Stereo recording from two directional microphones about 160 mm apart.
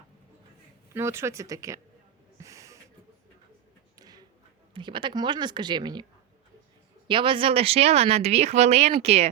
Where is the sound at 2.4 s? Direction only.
20° right (ahead or behind).